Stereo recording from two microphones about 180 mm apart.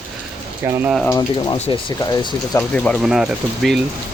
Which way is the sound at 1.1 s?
20° left (ahead or behind).